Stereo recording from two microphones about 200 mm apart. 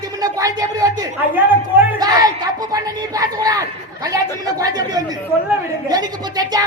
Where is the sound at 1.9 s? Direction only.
20° right (ahead or behind).